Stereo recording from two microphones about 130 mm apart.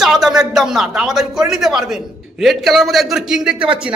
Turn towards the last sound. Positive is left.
turn(degrees=-10)  # may be behind; listen again after turning